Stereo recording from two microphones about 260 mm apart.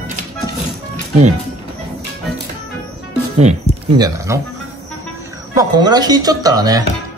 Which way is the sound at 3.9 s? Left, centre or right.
Centre.